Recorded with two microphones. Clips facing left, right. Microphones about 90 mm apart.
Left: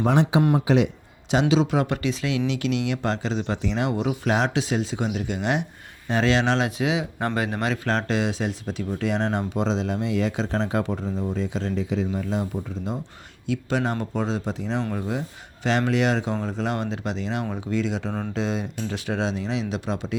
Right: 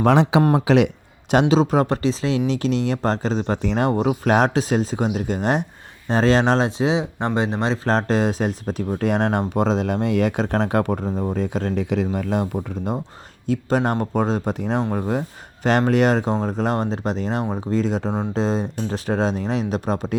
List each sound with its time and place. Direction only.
0.0 s speech: 90° right
1.3 s speech: 45° right (ahead or behind)
6.7 s speech: 30° right (ahead or behind); by 13.0 s 55° right (ahead or behind)
13.5 s speech: 40° right (ahead or behind)